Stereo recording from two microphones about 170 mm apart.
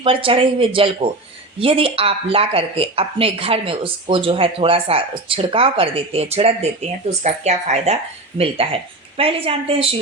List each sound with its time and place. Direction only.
0.0 s speech: 30° right (ahead or behind)